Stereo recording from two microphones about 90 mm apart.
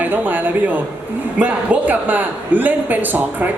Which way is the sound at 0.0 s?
20° right (ahead or behind).